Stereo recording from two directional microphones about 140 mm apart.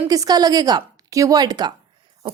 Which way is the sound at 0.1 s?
25° right (ahead or behind).